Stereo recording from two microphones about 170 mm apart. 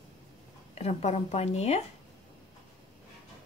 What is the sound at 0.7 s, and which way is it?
Speech, 40° left (ahead or behind).